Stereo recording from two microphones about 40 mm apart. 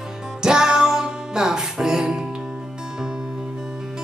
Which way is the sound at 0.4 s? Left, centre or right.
Centre.